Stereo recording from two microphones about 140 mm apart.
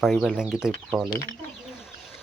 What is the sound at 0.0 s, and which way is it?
Speech, centre (ahead or behind).